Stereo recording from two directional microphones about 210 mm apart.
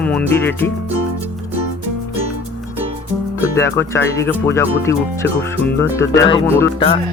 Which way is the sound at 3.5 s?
15° left (ahead or behind).